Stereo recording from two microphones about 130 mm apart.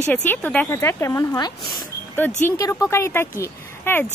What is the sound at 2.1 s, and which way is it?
A woman's voice, 15° left (ahead or behind).